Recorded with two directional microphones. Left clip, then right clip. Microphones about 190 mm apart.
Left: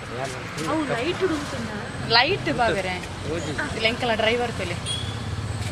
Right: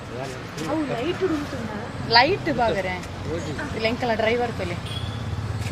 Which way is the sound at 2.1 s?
20° right (ahead or behind).